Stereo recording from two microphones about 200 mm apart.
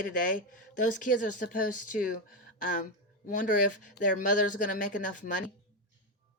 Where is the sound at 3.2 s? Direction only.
40° left (ahead or behind).